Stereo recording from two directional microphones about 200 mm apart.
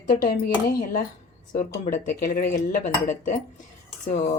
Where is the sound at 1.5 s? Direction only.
40° left (ahead or behind).